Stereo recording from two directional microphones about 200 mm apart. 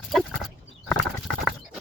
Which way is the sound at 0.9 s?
5° left (ahead or behind).